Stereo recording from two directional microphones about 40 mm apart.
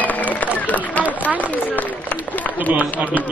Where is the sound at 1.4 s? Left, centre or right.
Left.